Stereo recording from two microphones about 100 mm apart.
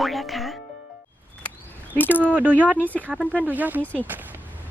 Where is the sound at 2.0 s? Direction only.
20° left (ahead or behind).